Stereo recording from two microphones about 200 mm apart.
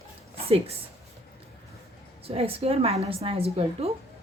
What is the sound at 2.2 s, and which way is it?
A woman's voice, 30° right (ahead or behind).